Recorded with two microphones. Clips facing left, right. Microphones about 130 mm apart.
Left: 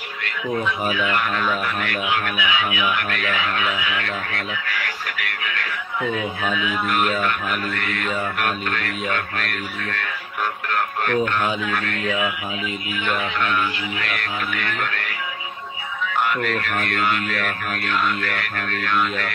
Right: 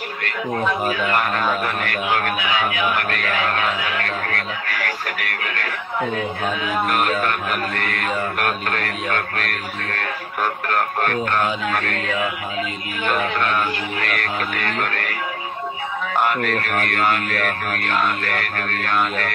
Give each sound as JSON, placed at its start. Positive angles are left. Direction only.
{"t": 0.7, "sound": "speech", "side_deg": -45}
{"t": 13.0, "sound": "speech", "side_deg": -45}